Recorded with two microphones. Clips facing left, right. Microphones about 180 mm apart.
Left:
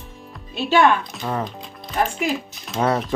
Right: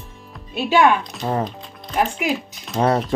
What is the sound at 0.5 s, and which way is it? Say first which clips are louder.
Speech: right 1 dB; 5° right (ahead or behind).